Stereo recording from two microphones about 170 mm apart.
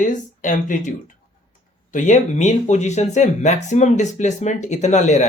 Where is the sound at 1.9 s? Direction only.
45° left (ahead or behind).